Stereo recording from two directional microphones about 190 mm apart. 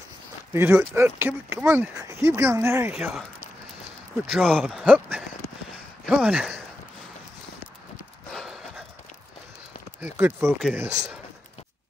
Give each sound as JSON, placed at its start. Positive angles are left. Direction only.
{"t": 0.5, "sound": "speech", "side_deg": -15}
{"t": 2.9, "sound": "speech", "side_deg": -5}
{"t": 4.3, "sound": "speech", "side_deg": 0}
{"t": 4.6, "sound": "a sound", "side_deg": -5}
{"t": 6.0, "sound": "speech", "side_deg": -5}
{"t": 8.3, "sound": "horse", "side_deg": 0}
{"t": 9.9, "sound": "speech", "side_deg": -10}